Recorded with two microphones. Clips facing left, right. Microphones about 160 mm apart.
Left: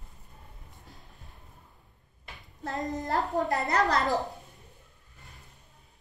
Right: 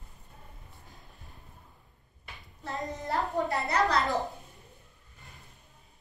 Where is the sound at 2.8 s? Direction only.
40° left (ahead or behind).